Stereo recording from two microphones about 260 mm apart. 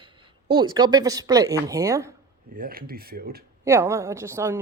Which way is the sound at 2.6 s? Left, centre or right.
Right.